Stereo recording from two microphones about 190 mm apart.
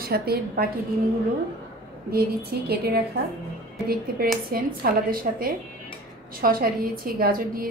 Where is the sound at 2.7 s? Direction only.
55° right (ahead or behind).